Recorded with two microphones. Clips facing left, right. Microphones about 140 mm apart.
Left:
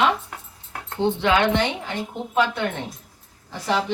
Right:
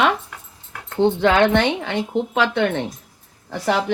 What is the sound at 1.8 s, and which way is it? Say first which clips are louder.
A woman's voice: right 7 dB; 85° right.